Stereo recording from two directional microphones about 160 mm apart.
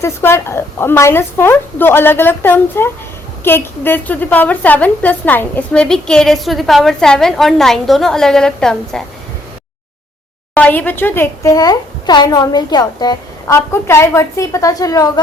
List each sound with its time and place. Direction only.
0.0 s a woman's voice: 15° left (ahead or behind)
10.5 s a child's voice: 10° left (ahead or behind)